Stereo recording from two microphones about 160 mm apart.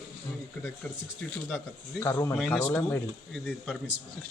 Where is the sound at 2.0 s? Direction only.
20° left (ahead or behind).